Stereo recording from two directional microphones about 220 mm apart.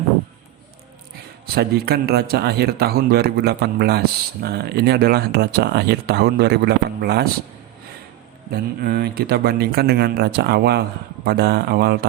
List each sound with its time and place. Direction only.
1.5 s speech: 45° right (ahead or behind)
8.4 s speech: 45° right (ahead or behind)